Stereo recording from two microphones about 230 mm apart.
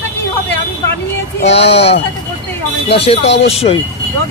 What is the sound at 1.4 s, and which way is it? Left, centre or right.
Speech, left.